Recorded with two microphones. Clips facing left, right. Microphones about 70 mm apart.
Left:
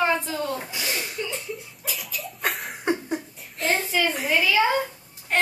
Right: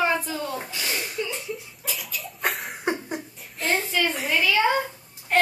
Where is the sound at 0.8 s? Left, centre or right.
Centre.